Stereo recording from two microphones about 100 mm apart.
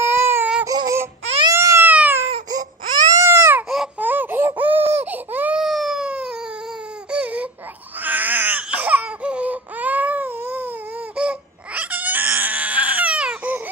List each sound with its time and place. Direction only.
0.0 s baby cry: 25° right (ahead or behind)
0.7 s baby cry: 35° right (ahead or behind)
1.5 s a sound: 30° right (ahead or behind)
1.9 s baby cry: 15° right (ahead or behind)
3.2 s baby cry: 30° right (ahead or behind)
3.6 s a sound: 5° right (ahead or behind)
4.0 s a sound: 20° right (ahead or behind)
4.9 s baby cry: 20° right (ahead or behind)
5.6 s baby cry: centre (ahead or behind)